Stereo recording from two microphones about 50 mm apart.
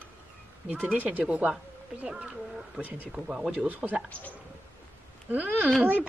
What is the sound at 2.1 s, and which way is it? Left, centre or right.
Speech, centre.